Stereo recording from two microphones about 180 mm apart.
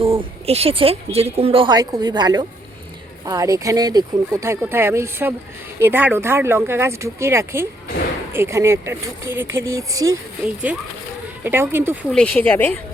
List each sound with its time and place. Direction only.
0.0 s speech: 30° right (ahead or behind); by 11.9 s 10° right (ahead or behind)
12.1 s speech: 10° left (ahead or behind)